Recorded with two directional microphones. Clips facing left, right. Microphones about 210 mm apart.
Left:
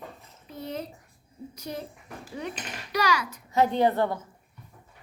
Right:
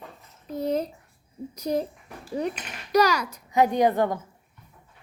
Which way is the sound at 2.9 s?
40° right (ahead or behind).